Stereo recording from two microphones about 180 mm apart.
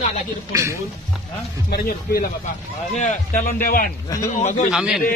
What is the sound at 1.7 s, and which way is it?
Speech, 60° left (ahead or behind).